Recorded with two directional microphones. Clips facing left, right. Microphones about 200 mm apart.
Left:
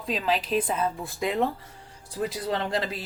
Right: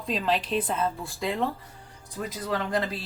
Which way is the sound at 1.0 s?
20° left (ahead or behind).